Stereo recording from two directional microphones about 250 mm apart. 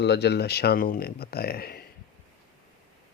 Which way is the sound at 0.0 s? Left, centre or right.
Left.